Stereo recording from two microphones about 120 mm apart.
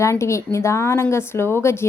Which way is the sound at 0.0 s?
25° left (ahead or behind).